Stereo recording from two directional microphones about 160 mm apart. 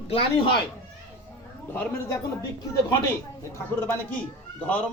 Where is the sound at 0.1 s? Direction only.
35° left (ahead or behind).